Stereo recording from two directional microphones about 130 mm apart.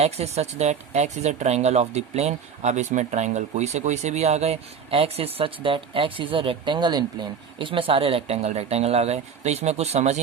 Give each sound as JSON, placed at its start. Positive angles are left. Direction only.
{"t": 0.0, "sound": "speech", "side_deg": -55}